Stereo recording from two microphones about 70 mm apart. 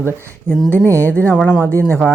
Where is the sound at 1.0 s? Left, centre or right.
Left.